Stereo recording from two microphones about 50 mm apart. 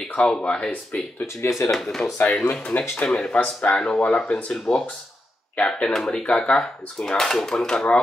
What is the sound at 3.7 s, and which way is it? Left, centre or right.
Speech, centre.